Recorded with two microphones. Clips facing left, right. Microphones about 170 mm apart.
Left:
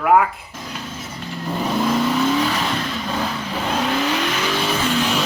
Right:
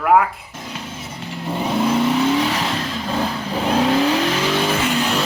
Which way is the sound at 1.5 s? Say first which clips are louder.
Right 1 dB; 25° right (ahead or behind).